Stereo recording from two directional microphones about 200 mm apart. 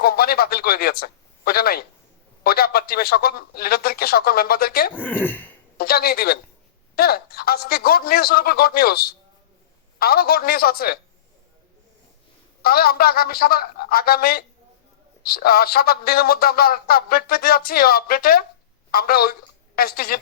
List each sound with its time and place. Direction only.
0.0 s speech: 50° left (ahead or behind)
4.9 s speech: 10° left (ahead or behind)
5.7 s speech: 50° left (ahead or behind)
12.6 s a woman's voice: 50° left (ahead or behind)